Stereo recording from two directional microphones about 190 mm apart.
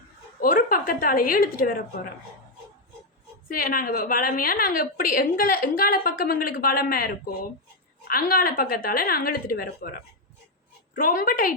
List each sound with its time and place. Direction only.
0.4 s a woman's voice: 45° left (ahead or behind)
3.5 s a woman's voice: 50° left (ahead or behind)
10.9 s a woman's voice: 50° left (ahead or behind)